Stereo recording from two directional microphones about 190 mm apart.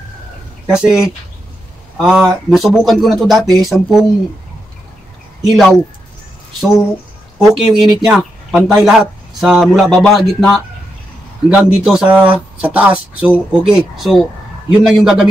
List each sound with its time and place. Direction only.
0.7 s speech: 5° right (ahead or behind)
5.4 s speech: centre (ahead or behind)
7.3 s speech: centre (ahead or behind)